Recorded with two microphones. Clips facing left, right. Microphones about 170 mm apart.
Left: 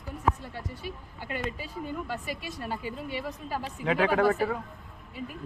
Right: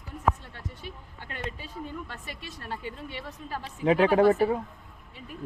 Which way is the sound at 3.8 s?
30° right (ahead or behind).